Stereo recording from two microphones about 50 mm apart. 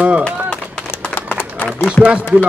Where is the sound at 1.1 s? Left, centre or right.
Left.